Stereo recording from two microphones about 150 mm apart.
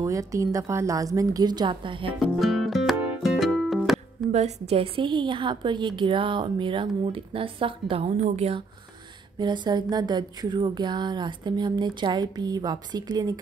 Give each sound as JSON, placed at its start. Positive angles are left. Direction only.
{"t": 0.0, "sound": "speech", "side_deg": -20}
{"t": 2.3, "sound": "music", "side_deg": 0}
{"t": 4.3, "sound": "a woman's voice", "side_deg": -45}
{"t": 9.4, "sound": "speech", "side_deg": -30}